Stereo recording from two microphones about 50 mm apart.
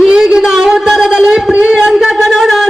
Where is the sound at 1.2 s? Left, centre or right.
Centre.